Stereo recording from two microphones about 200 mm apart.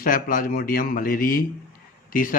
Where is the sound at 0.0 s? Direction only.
45° left (ahead or behind).